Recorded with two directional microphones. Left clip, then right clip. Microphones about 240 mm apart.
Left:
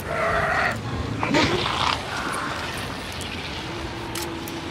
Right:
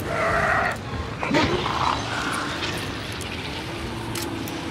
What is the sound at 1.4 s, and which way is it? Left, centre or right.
Dog, left.